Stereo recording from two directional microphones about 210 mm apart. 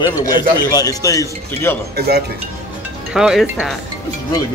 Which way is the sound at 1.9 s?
50° right (ahead or behind).